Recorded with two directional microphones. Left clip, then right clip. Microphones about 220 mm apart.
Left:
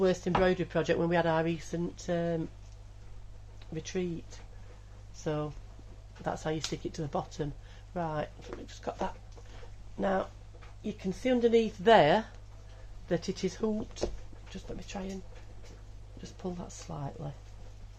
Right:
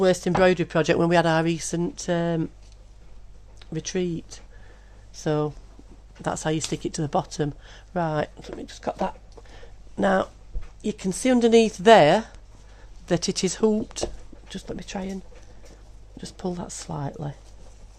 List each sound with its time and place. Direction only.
0.0 s speech: 50° right (ahead or behind)
3.8 s speech: 50° right (ahead or behind); by 12.3 s 30° right (ahead or behind)
13.1 s speech: 50° right (ahead or behind)
16.2 s speech: 50° right (ahead or behind)